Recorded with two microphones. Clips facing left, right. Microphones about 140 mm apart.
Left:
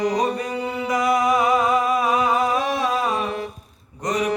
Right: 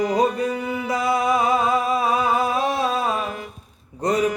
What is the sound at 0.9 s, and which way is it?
Music, 25° right (ahead or behind).